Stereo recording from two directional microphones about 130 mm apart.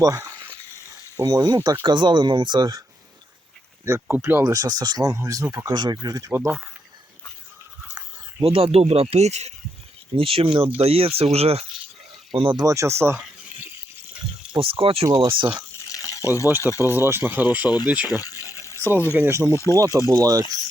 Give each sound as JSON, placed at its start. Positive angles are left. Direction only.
{"t": 0.0, "sound": "speech", "side_deg": -25}
{"t": 3.8, "sound": "speech", "side_deg": -20}
{"t": 4.8, "sound": "speech", "side_deg": -30}
{"t": 8.4, "sound": "speech", "side_deg": -50}
{"t": 10.2, "sound": "speech", "side_deg": -45}
{"t": 12.3, "sound": "speech", "side_deg": -35}
{"t": 12.6, "sound": "speech", "side_deg": -25}
{"t": 14.5, "sound": "speech", "side_deg": -45}
{"t": 15.0, "sound": "speech", "side_deg": -25}
{"t": 15.9, "sound": "water", "side_deg": 25}
{"t": 16.6, "sound": "speech", "side_deg": 25}
{"t": 16.9, "sound": "speech", "side_deg": -20}
{"t": 18.1, "sound": "pour", "side_deg": 25}
{"t": 19.1, "sound": "speech", "side_deg": -20}